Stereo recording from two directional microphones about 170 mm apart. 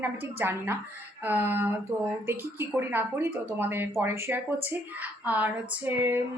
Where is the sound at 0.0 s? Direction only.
10° right (ahead or behind).